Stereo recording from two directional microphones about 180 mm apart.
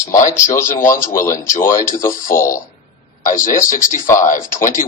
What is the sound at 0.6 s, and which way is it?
Speech, 45° left (ahead or behind).